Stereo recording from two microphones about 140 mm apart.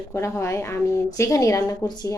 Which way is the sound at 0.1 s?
20° left (ahead or behind).